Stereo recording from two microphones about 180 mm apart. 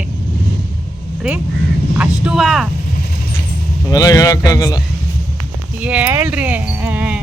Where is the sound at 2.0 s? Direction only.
5° right (ahead or behind).